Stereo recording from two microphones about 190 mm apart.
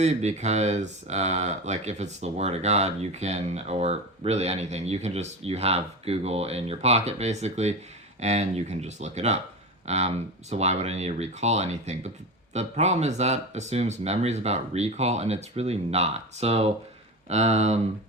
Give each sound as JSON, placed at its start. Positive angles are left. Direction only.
{"t": 0.0, "sound": "speech", "side_deg": -35}